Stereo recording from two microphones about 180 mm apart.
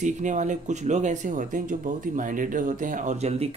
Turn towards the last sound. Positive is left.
turn(degrees=-35)  # may be behind; listen again after turning